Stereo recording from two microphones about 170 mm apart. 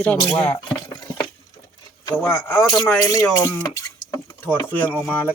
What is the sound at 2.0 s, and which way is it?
Speech, 15° left (ahead or behind).